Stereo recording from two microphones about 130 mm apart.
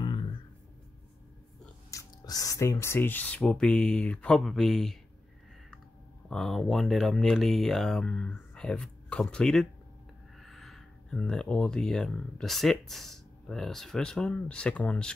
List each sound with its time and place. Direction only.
0.0 s a sound: 35° left (ahead or behind)
1.9 s speech: 25° left (ahead or behind); by 4.9 s centre (ahead or behind)
6.3 s speech: centre (ahead or behind)